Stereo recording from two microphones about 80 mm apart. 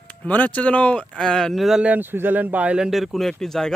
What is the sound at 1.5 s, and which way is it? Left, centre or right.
Speech, centre.